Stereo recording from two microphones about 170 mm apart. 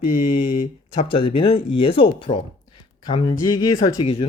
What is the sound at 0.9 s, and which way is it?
Speech, 30° left (ahead or behind).